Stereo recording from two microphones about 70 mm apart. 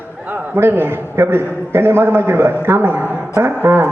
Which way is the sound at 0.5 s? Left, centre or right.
Right.